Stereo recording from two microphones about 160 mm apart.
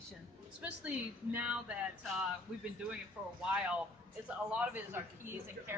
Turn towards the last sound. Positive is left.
turn(degrees=-10)  # may be behind; listen again after turning